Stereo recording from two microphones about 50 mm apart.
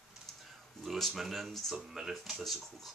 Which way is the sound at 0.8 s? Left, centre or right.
Centre.